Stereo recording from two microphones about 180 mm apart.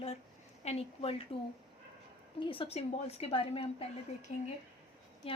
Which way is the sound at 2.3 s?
30° left (ahead or behind).